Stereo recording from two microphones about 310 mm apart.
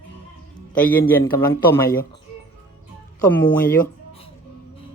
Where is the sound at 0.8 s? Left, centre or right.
Centre.